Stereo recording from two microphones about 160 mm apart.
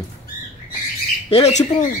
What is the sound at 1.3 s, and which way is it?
Speech, 45° left (ahead or behind).